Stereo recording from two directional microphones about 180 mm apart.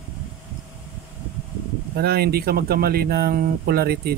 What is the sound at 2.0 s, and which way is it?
Speech, 60° right (ahead or behind).